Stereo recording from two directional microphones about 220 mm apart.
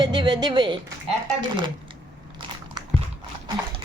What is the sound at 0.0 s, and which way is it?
Speech, 20° right (ahead or behind).